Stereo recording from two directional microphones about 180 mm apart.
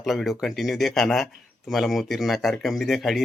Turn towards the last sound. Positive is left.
turn(degrees=0)  # may be behind; listen again after turning